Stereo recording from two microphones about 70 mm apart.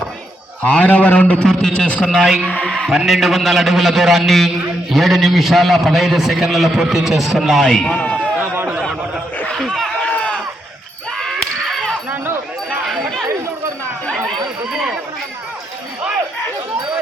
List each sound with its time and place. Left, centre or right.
0.6 s a man's voice: left
1.5 s a man's voice: centre
2.0 s a man's voice: centre
2.6 s a sound: centre
2.9 s a man's voice: centre
9.5 s a sound: centre
10.1 s sheep: centre
11.3 s a sound: centre
14.7 s chatter: centre